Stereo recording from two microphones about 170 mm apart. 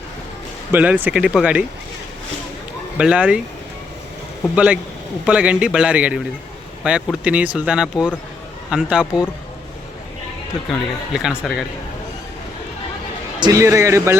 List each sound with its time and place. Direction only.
0.7 s a man's voice: 10° right (ahead or behind)
3.0 s a man's voice: 5° right (ahead or behind)
4.5 s a man's voice: 5° right (ahead or behind)
10.7 s speech: centre (ahead or behind)
13.4 s a man's voice: 20° right (ahead or behind)